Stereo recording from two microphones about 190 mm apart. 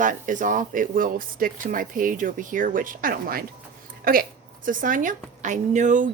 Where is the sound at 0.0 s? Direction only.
45° right (ahead or behind).